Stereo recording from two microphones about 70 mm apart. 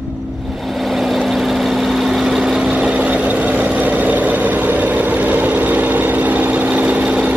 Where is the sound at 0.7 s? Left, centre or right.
Centre.